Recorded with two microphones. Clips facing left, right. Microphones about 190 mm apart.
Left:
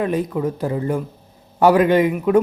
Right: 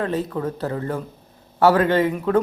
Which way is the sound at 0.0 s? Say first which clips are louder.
Left 3 dB; 15° left (ahead or behind).